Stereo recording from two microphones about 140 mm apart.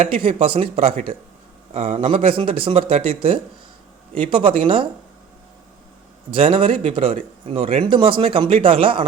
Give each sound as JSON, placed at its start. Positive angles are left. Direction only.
{"t": 0.1, "sound": "speech", "side_deg": -45}
{"t": 6.3, "sound": "speech", "side_deg": -40}